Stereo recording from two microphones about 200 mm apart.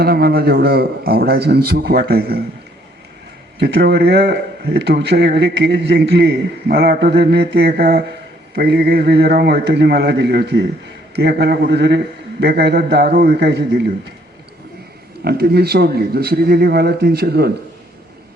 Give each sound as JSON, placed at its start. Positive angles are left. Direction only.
{"t": 0.0, "sound": "a man's voice", "side_deg": -50}
{"t": 3.6, "sound": "a man's voice", "side_deg": -55}
{"t": 15.2, "sound": "a man's voice", "side_deg": -50}